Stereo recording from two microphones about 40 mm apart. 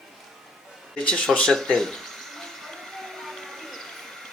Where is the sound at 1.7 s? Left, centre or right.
Centre.